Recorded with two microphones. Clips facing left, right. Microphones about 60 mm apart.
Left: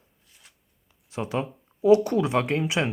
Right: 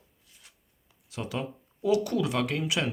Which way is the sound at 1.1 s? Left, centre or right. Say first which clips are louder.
Left 5 dB; left.